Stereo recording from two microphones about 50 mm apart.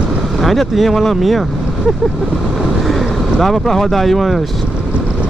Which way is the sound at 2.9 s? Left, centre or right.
Centre.